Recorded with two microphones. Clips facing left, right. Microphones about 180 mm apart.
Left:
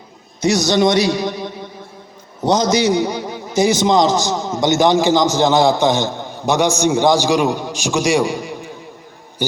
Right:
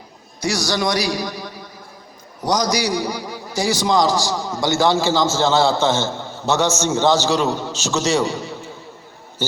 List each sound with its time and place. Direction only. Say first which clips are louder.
0.3 s a man's voice: left 7 dB; 20° left (ahead or behind)